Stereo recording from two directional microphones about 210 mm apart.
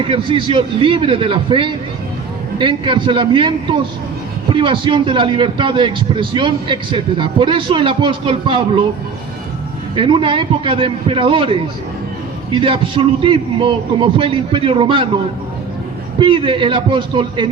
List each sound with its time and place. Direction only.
0.0 s a man's voice: 25° right (ahead or behind)
9.9 s a man's voice: 25° right (ahead or behind)